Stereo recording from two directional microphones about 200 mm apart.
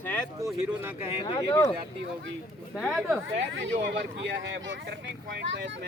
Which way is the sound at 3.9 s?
65° right (ahead or behind).